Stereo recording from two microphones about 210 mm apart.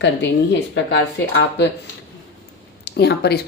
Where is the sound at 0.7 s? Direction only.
55° left (ahead or behind).